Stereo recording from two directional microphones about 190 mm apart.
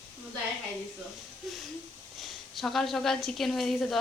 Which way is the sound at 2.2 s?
Centre (ahead or behind).